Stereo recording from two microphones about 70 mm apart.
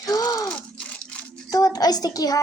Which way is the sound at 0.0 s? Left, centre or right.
Left.